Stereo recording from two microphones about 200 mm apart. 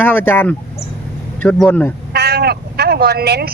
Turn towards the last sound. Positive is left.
turn(degrees=-55)  # may be behind; listen again after turning